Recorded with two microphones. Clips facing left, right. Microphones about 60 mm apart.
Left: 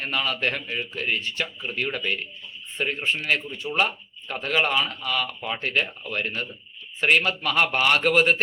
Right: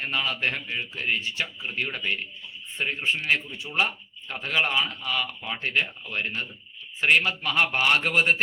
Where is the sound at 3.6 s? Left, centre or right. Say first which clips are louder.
Left 4 dB; left.